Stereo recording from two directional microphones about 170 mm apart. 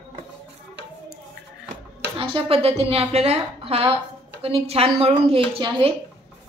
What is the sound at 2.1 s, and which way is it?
A woman's voice, 35° right (ahead or behind).